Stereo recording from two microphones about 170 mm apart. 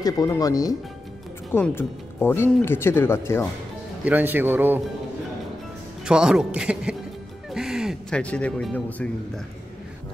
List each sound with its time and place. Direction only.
0.0 s speech: 20° left (ahead or behind)
4.0 s speech: 10° right (ahead or behind)
6.0 s a man's voice: 5° right (ahead or behind)